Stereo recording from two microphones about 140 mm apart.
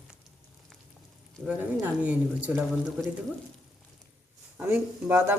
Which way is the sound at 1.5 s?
10° right (ahead or behind).